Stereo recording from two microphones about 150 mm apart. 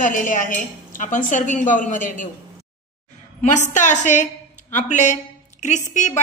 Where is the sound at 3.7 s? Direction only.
55° left (ahead or behind).